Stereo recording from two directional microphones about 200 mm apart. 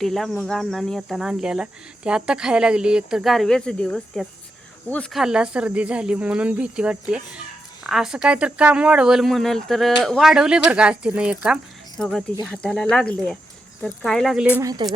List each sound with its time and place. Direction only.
0.0 s speech: centre (ahead or behind)
14.6 s speech: 20° right (ahead or behind)